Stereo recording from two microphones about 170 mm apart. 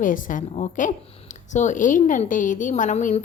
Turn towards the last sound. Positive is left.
turn(degrees=40)  # may be behind; listen again after turning